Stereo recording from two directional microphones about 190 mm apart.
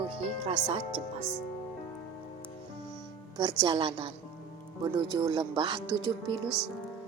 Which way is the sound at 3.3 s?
20° right (ahead or behind).